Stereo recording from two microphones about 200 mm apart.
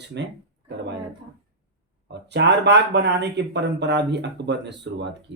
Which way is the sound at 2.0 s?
60° right (ahead or behind).